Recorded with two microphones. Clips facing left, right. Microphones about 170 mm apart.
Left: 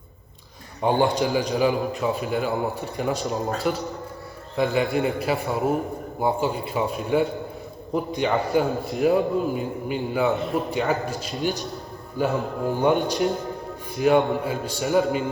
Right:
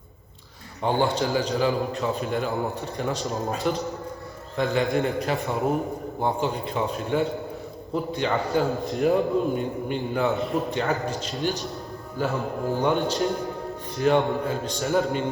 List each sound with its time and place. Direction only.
0.8 s a man's voice: 15° left (ahead or behind)